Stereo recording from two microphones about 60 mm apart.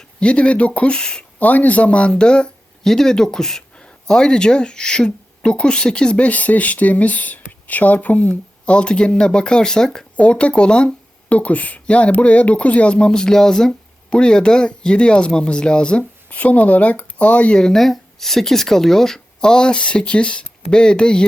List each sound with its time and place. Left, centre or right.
0.2 s speech: centre
1.4 s speech: left; by 10.1 s centre
10.2 s speech: left
17.6 s speech: centre